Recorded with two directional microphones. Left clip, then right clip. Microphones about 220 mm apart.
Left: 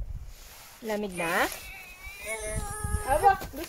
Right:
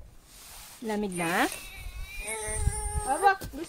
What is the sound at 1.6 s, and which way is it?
Cat, 30° right (ahead or behind).